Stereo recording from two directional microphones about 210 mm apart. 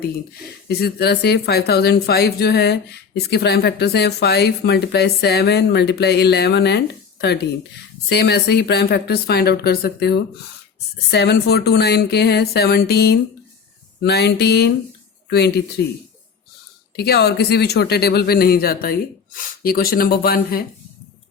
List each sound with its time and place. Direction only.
0.7 s speech: 50° left (ahead or behind)
17.0 s speech: 50° left (ahead or behind)